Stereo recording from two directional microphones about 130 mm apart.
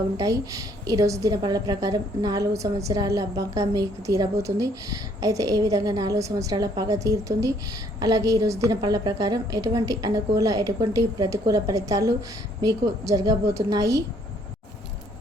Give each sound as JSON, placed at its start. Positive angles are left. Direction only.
{"t": 0.2, "sound": "a woman's voice", "side_deg": -25}